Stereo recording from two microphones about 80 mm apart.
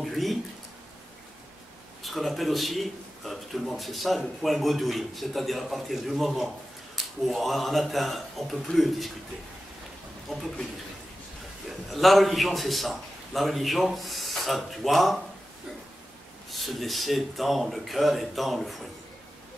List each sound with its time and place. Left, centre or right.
0.0 s a sound: centre
2.0 s a man's voice: centre
10.3 s a man's voice: centre
11.9 s a man's voice: centre
16.4 s a man's voice: centre